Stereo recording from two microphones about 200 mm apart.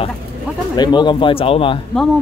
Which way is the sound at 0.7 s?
20° left (ahead or behind).